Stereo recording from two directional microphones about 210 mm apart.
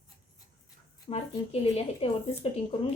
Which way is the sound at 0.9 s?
25° left (ahead or behind).